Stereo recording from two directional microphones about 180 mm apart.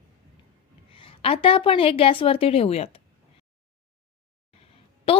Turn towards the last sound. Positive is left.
turn(degrees=30)  # may be behind; listen again after turning